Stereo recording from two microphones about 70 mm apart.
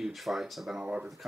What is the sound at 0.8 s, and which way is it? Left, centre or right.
Speech, centre.